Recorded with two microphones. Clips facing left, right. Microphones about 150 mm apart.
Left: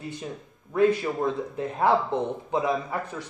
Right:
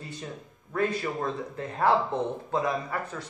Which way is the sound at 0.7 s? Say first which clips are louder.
Left 6 dB; 15° left (ahead or behind).